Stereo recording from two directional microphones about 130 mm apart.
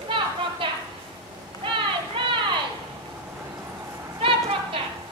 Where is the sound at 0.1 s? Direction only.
40° right (ahead or behind).